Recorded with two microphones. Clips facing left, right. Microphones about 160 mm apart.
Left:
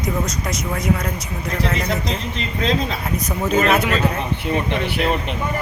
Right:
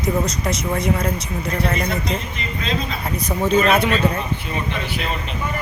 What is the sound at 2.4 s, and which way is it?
Speech, 75° left (ahead or behind).